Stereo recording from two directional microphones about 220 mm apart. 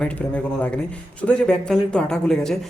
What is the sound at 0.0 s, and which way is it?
A man's voice, 5° left (ahead or behind).